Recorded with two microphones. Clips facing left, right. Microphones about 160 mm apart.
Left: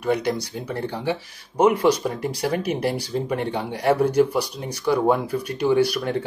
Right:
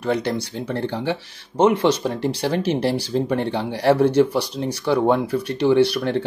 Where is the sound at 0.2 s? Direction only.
30° right (ahead or behind).